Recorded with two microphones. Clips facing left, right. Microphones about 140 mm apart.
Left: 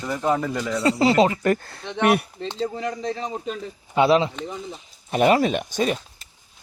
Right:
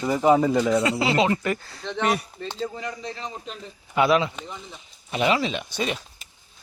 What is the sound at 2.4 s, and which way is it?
Speech, 20° left (ahead or behind).